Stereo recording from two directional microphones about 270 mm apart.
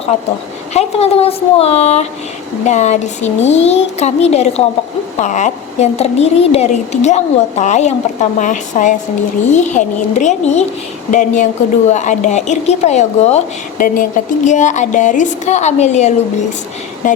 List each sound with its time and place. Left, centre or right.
0.1 s a woman's voice: left